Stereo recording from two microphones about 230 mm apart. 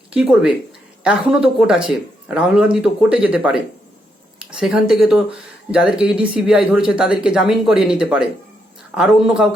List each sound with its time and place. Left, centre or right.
0.1 s speech: centre